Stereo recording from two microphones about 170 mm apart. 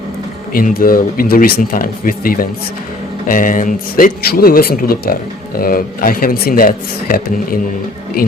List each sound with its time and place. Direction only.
0.5 s speech: 55° left (ahead or behind)